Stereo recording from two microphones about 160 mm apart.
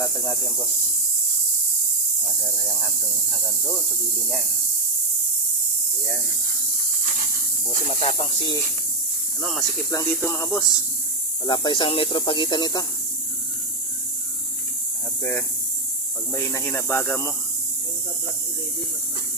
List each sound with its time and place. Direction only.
7.9 s speech: 40° left (ahead or behind)
9.4 s speech: centre (ahead or behind)
10.2 s speech: 15° left (ahead or behind)
11.4 s speech: 30° left (ahead or behind)
15.2 s speech: 15° left (ahead or behind)